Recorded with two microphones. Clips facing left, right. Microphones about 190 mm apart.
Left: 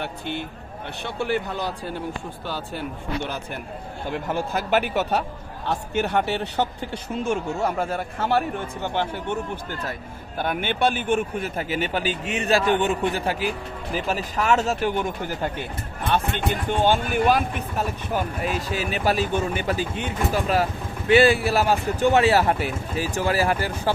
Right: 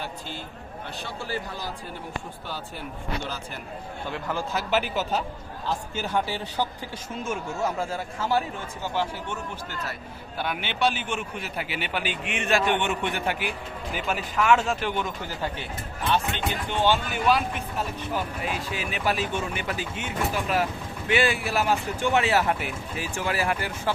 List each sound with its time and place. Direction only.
0.0 s a man's voice: 65° left (ahead or behind)
3.2 s a man's voice: 60° left (ahead or behind); by 23.9 s 35° left (ahead or behind)